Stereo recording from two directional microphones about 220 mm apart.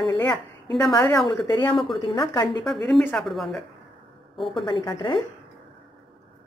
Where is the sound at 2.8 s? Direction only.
Centre (ahead or behind).